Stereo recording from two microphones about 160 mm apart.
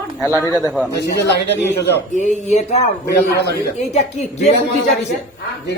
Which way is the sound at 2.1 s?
45° left (ahead or behind).